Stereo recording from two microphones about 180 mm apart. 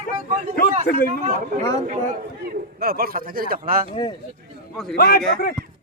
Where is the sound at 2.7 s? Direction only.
55° right (ahead or behind).